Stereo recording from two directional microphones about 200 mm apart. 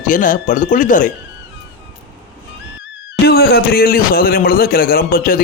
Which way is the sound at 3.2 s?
50° left (ahead or behind).